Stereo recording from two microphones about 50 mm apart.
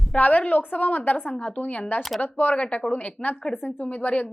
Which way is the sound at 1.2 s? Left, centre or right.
Left.